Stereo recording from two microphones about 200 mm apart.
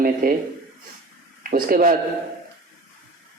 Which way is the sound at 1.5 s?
45° right (ahead or behind).